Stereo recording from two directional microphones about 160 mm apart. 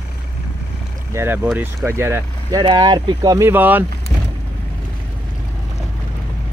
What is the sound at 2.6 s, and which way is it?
Speech, 25° right (ahead or behind).